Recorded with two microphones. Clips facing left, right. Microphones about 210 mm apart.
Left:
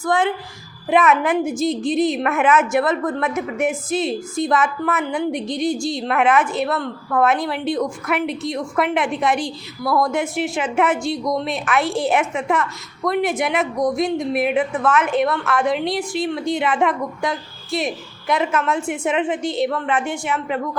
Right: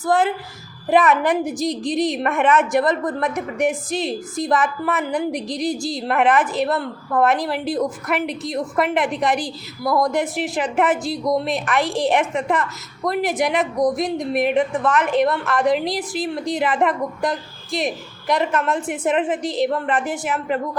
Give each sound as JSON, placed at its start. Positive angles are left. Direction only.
{"t": 0.0, "sound": "a woman's voice", "side_deg": -5}
{"t": 9.8, "sound": "speech", "side_deg": -15}
{"t": 10.1, "sound": "a woman's voice", "side_deg": 0}